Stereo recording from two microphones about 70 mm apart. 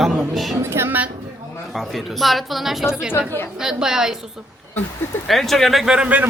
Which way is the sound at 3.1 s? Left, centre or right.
Left.